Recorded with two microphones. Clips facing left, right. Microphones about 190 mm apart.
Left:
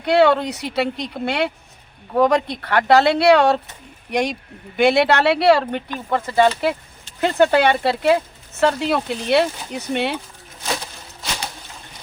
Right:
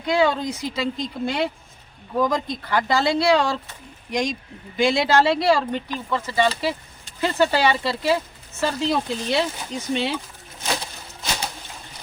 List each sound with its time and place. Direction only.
0.0 s a woman's voice: 65° left (ahead or behind)